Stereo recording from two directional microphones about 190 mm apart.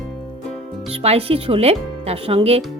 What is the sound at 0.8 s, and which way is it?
Speech, 35° right (ahead or behind).